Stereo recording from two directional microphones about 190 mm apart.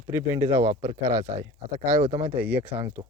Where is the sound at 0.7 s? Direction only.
40° right (ahead or behind).